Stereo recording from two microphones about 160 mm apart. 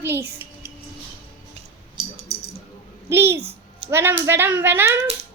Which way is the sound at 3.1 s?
15° right (ahead or behind).